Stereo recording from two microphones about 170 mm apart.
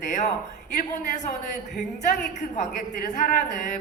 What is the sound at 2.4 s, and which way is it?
A man's voice, 45° left (ahead or behind).